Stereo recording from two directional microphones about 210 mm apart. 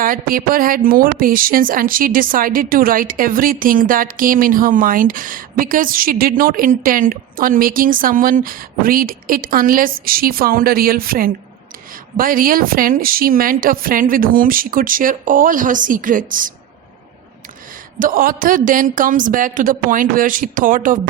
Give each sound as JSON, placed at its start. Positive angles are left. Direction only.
{"t": 0.0, "sound": "a woman's voice", "side_deg": -45}
{"t": 18.0, "sound": "speech", "side_deg": -40}